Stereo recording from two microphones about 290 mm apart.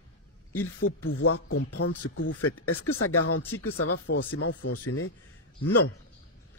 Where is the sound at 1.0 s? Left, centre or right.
Left.